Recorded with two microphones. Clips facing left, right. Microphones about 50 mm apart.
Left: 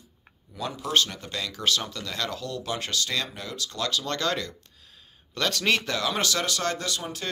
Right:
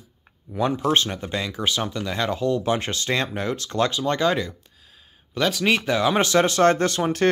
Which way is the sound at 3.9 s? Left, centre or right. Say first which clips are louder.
Right 6 dB; right.